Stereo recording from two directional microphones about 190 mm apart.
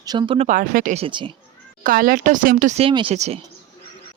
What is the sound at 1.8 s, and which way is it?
Speech, 45° right (ahead or behind).